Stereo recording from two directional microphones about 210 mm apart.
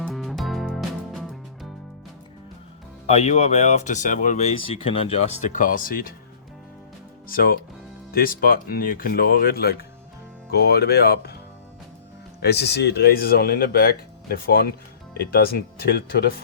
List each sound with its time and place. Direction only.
0.0 s music: centre (ahead or behind)
3.1 s speech: 30° left (ahead or behind)
7.3 s speech: 45° left (ahead or behind)
12.4 s speech: 50° left (ahead or behind)